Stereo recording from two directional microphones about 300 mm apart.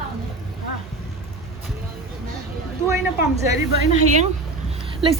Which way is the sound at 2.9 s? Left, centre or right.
Centre.